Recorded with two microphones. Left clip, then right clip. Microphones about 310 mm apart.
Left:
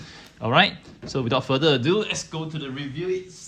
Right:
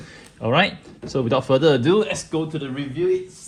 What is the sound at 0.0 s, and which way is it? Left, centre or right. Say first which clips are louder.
Speech: right 3 dB; centre.